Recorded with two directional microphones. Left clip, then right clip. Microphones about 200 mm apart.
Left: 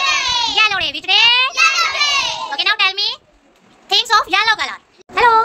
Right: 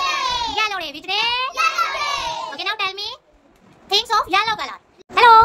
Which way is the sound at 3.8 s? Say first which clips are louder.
Left 4 dB; 5° right (ahead or behind).